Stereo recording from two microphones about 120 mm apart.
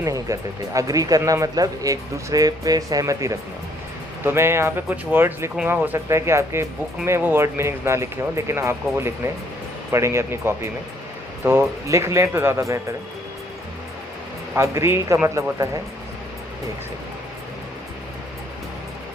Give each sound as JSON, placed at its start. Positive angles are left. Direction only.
{"t": 0.0, "sound": "speech", "side_deg": -30}
{"t": 14.5, "sound": "speech", "side_deg": -25}